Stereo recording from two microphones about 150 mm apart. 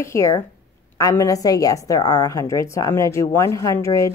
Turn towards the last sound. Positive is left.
turn(degrees=20)  # may be behind; listen again after turning